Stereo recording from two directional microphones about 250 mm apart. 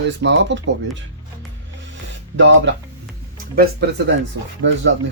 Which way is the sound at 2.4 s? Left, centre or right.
Right.